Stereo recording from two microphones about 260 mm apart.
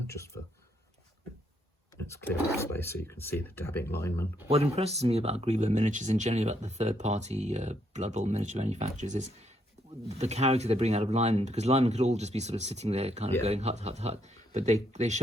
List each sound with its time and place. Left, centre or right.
2.0 s speech: centre
4.4 s speech: right